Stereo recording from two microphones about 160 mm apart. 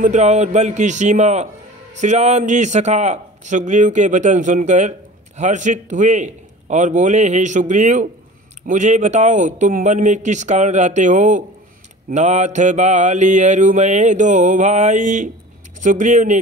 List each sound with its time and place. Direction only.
0.0 s mantra: 45° right (ahead or behind)